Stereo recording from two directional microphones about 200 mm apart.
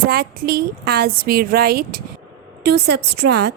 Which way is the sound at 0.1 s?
50° right (ahead or behind).